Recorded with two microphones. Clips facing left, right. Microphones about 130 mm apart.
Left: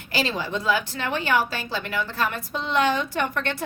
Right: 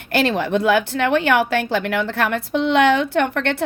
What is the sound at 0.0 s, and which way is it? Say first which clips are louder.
A woman's voice: right 7 dB; 60° right (ahead or behind).